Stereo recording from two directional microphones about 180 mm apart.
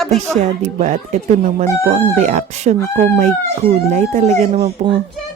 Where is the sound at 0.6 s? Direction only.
45° right (ahead or behind).